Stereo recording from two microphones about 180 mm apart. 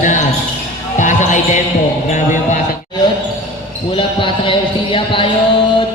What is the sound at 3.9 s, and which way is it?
Speech, 30° left (ahead or behind).